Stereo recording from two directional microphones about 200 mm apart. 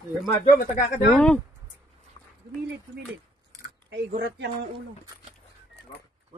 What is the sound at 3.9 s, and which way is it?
Speech, 55° right (ahead or behind).